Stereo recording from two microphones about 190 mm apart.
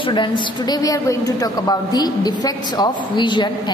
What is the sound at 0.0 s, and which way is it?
A woman's voice, 25° left (ahead or behind).